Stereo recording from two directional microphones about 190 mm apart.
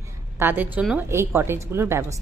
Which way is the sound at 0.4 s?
10° right (ahead or behind).